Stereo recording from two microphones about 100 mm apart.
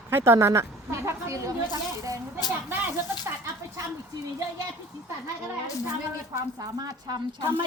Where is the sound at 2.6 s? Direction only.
20° right (ahead or behind).